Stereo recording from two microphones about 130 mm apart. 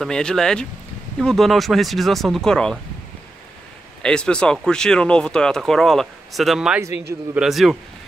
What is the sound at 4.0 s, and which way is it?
Speech, 5° left (ahead or behind).